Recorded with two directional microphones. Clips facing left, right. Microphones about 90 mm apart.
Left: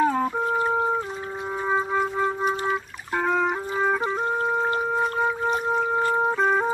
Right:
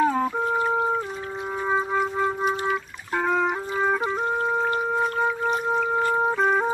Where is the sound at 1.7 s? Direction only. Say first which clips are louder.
Even; centre (ahead or behind).